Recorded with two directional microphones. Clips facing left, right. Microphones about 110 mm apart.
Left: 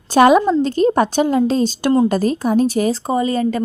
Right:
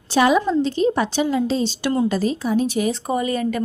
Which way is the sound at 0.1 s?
50° left (ahead or behind).